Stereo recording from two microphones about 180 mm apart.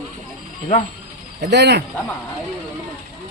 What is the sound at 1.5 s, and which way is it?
Speech, 70° right (ahead or behind).